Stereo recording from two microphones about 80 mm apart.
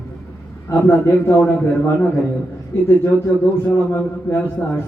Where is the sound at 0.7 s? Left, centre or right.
Left.